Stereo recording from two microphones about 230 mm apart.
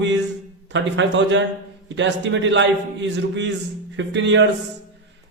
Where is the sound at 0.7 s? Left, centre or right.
Right.